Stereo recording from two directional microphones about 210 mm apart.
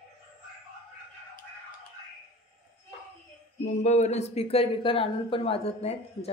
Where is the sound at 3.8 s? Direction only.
35° left (ahead or behind).